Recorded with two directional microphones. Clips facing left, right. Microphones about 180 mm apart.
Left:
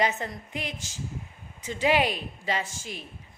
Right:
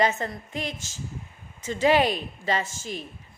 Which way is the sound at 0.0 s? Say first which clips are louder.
Right 3 dB; 15° left (ahead or behind).